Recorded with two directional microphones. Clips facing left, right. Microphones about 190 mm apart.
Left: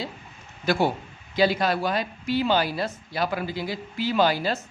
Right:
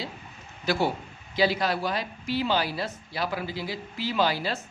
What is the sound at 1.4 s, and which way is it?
Speech, 50° left (ahead or behind).